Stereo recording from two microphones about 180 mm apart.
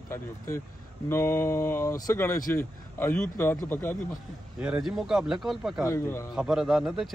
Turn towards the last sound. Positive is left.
turn(degrees=0)  # may be behind; listen again after turning